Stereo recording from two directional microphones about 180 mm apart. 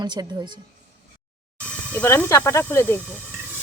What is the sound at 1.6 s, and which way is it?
Speech, 10° left (ahead or behind).